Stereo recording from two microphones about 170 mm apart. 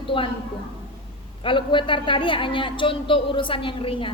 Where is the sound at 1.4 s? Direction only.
30° left (ahead or behind).